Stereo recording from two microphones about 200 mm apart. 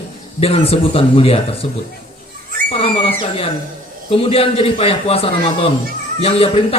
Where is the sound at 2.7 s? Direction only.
30° left (ahead or behind).